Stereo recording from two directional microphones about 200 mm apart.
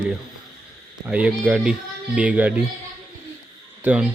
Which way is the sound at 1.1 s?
5° right (ahead or behind).